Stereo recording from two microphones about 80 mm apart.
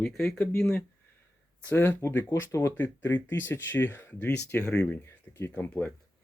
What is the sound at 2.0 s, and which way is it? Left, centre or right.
Speech, left.